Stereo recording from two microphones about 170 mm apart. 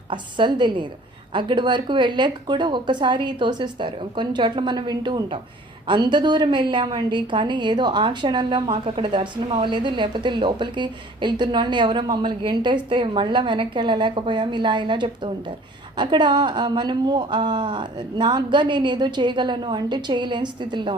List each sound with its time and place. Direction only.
0.1 s a woman's voice: 25° right (ahead or behind)